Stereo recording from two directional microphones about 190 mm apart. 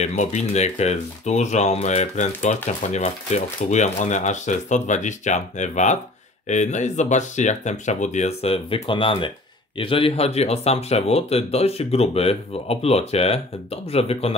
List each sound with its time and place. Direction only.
0.0 s speech: 35° left (ahead or behind)